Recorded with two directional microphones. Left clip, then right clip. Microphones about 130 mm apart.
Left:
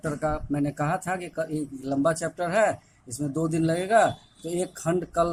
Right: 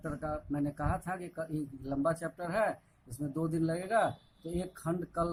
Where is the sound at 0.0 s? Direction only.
50° left (ahead or behind).